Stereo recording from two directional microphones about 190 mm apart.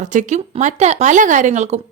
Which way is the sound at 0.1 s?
40° right (ahead or behind).